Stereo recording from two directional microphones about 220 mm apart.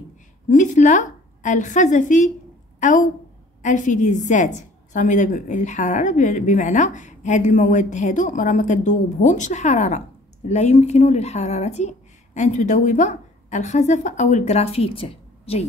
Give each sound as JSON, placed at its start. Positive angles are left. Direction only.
{"t": 0.5, "sound": "a woman's voice", "side_deg": 35}